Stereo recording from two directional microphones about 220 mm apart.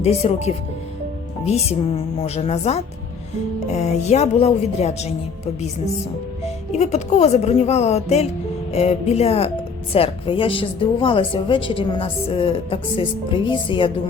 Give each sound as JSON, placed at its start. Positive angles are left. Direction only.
{"t": 0.0, "sound": "a woman's voice", "side_deg": 30}
{"t": 2.2, "sound": "a woman's voice", "side_deg": 30}
{"t": 6.4, "sound": "a woman's voice", "side_deg": 30}